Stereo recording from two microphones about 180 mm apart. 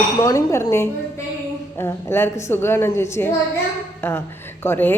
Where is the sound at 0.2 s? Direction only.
15° left (ahead or behind).